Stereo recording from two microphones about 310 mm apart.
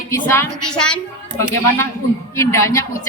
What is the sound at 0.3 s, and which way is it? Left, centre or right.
A woman's voice, centre.